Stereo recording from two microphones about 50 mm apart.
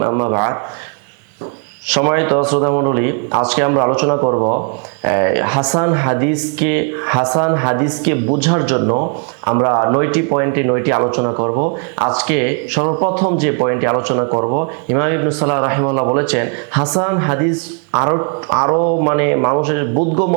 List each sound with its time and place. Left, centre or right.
0.0 s a man's voice: right
1.9 s a man's voice: right